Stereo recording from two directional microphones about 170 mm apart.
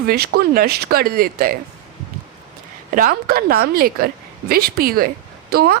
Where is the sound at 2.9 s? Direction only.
55° right (ahead or behind).